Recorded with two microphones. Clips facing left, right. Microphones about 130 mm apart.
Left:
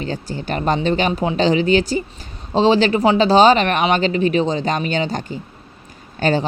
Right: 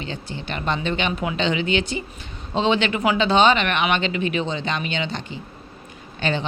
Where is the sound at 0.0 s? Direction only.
40° left (ahead or behind).